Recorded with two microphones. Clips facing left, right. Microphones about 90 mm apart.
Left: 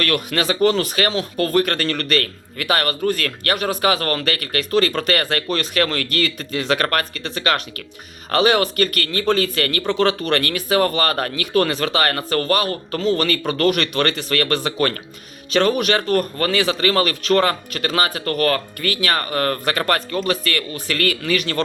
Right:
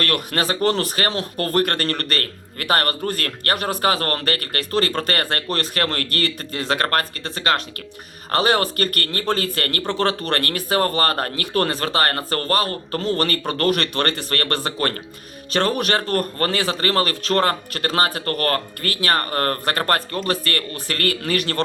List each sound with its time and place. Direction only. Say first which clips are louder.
0.0 s a man's voice: left 2 dB; 40° right (ahead or behind)
9.8 s speech: left 3 dB; 20° right (ahead or behind)
10.1 s a man's voice: left 3 dB; 40° right (ahead or behind)
13.0 s a man's voice: left 3 dB; 45° right (ahead or behind)
16.1 s a man's voice: left 2 dB; 40° right (ahead or behind)